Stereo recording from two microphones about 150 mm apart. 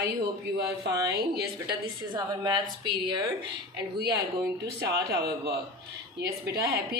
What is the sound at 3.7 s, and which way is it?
A woman's voice, 90° right.